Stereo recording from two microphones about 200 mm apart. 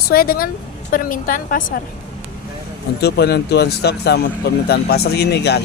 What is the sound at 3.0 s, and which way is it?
Speech, 55° left (ahead or behind).